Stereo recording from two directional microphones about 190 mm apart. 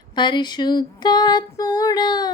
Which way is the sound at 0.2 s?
25° left (ahead or behind).